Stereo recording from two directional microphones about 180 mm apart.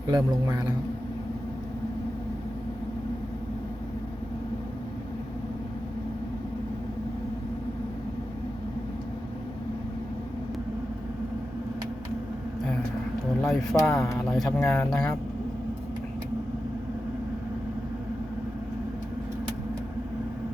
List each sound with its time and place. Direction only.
0.1 s a man's voice: 20° right (ahead or behind)
13.4 s a sound: centre (ahead or behind)
14.3 s speech: centre (ahead or behind)